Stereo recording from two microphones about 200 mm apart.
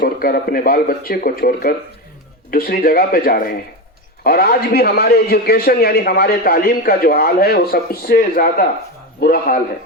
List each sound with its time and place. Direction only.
0.0 s a man's voice: 45° left (ahead or behind)